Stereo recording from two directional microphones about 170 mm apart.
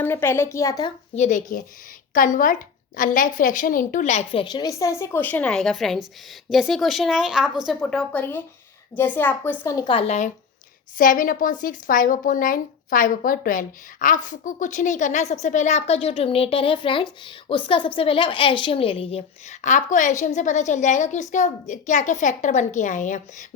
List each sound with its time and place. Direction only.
0.0 s a woman's voice: 15° left (ahead or behind)
1.1 s a woman's voice: 45° left (ahead or behind); by 9.7 s 10° left (ahead or behind)
9.7 s a woman's voice: 30° left (ahead or behind)
10.9 s a woman's voice: 55° left (ahead or behind)